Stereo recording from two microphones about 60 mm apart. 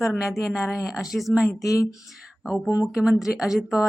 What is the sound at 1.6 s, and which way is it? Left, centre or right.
Speech, left.